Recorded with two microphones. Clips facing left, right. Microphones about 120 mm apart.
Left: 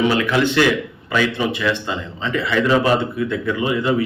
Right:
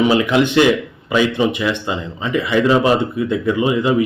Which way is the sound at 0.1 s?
20° right (ahead or behind).